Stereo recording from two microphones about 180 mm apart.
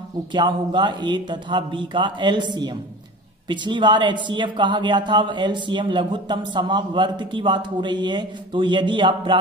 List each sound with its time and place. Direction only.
0.3 s speech: 25° right (ahead or behind)